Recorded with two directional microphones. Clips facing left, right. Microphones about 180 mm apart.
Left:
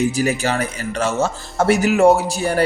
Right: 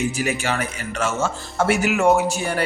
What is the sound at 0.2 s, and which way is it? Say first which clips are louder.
Speech: left 4 dB; 40° left (ahead or behind).